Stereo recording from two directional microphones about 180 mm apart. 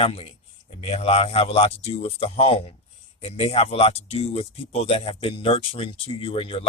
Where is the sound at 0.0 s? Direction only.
30° left (ahead or behind).